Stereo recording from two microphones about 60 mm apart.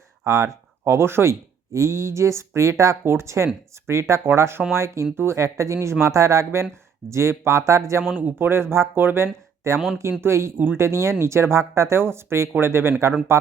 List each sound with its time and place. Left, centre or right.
0.3 s speech: right
3.0 s speech: right
5.1 s speech: right
5.4 s speech: right
8.0 s speech: right
8.4 s speech: right